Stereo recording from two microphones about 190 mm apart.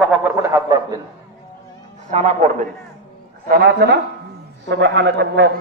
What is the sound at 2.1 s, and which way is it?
Speech, 35° right (ahead or behind).